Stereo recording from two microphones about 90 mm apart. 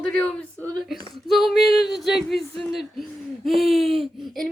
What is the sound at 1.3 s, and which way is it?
Speech, centre (ahead or behind).